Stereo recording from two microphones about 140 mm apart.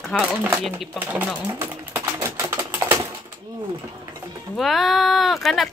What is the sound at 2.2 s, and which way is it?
Typing, 20° right (ahead or behind).